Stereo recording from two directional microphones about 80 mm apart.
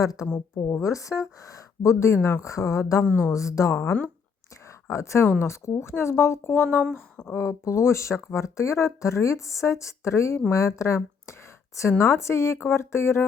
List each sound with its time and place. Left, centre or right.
0.0 s a woman's voice: left